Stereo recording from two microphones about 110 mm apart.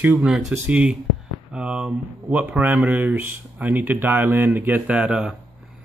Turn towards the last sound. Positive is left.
turn(degrees=-10)  # may be behind; listen again after turning